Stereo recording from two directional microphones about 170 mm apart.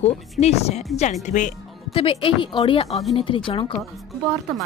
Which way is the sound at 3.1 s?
30° left (ahead or behind).